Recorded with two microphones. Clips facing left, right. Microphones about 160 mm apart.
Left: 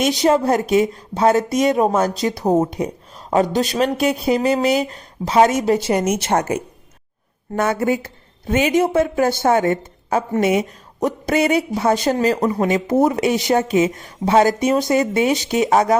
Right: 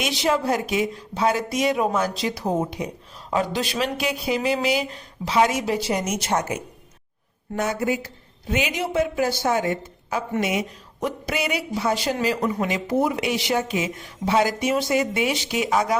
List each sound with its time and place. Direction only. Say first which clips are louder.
0.2 s speech: left 3 dB; 40° left (ahead or behind)